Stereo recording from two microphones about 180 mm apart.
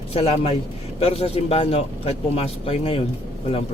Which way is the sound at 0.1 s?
35° left (ahead or behind).